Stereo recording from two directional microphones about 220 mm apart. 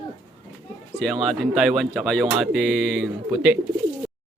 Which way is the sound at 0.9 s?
Centre (ahead or behind).